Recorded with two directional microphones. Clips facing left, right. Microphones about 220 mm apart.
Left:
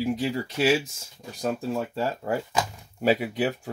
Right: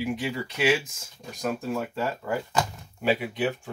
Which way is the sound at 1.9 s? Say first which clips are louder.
Left 2 dB; 35° left (ahead or behind).